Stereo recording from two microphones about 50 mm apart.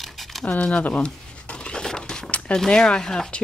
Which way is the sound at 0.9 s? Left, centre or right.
Left.